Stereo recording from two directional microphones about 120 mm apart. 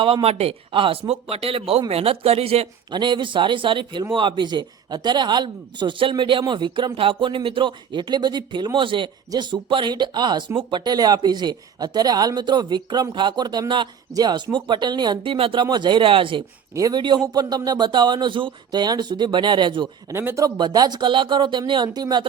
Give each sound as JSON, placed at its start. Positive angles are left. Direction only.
{"t": 0.0, "sound": "speech", "side_deg": -50}
{"t": 2.9, "sound": "speech", "side_deg": -40}
{"t": 16.7, "sound": "speech", "side_deg": -35}
{"t": 20.1, "sound": "speech", "side_deg": -25}
{"t": 20.6, "sound": "speech", "side_deg": -35}